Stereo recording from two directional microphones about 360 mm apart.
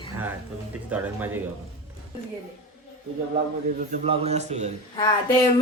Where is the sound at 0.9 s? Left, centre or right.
Centre.